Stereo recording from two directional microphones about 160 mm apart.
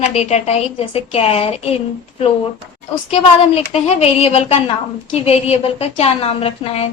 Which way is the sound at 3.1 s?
40° left (ahead or behind).